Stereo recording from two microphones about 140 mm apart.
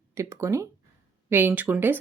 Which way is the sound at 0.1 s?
20° right (ahead or behind).